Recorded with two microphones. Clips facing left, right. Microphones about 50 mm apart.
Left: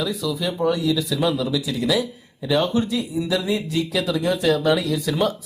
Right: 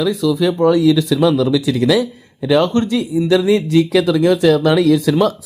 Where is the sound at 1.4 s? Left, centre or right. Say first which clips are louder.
Right 9 dB; right.